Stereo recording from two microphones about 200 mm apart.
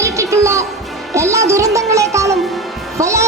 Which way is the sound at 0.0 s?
15° right (ahead or behind).